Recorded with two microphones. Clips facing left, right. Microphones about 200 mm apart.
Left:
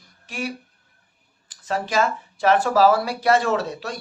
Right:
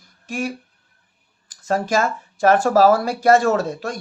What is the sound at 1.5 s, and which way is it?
Speech, 45° right (ahead or behind).